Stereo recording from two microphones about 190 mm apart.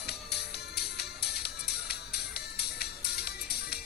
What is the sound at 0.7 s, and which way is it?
Music, 60° left (ahead or behind).